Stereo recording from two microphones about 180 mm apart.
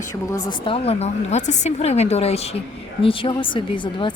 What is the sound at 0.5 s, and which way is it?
A woman's voice, 30° left (ahead or behind).